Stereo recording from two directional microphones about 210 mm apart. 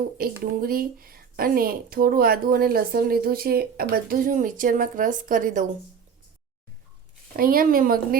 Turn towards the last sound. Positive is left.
turn(degrees=-45)  # may be behind; listen again after turning